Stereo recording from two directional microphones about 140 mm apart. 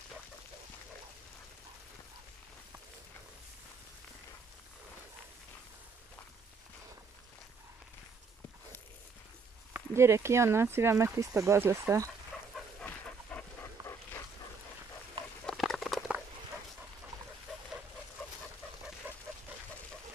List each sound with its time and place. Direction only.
9.8 s speech: 20° right (ahead or behind)
13.3 s dog: 10° left (ahead or behind)
13.8 s dog: 30° right (ahead or behind)
15.4 s patter: centre (ahead or behind)
19.1 s duck: 15° right (ahead or behind)